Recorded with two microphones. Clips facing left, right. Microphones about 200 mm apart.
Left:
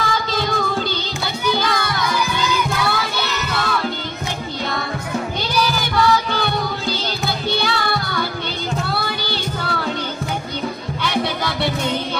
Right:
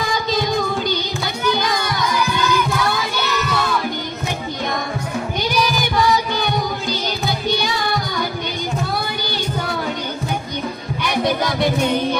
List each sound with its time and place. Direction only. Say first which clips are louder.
0.0 s child singing: right 1 dB; 15° right (ahead or behind)
1.6 s music: even; 15° right (ahead or behind)
5.5 s music: right 1 dB; 15° right (ahead or behind)
11.1 s music: right 3 dB; 15° right (ahead or behind)